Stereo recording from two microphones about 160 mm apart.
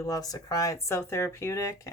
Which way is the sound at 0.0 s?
20° left (ahead or behind).